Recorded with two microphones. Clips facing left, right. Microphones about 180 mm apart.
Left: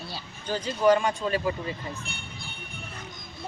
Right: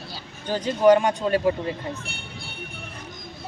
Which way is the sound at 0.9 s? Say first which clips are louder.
Right 5 dB; 50° right (ahead or behind).